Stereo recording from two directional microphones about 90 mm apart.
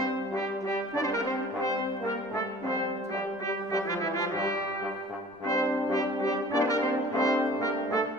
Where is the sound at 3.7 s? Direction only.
40° left (ahead or behind).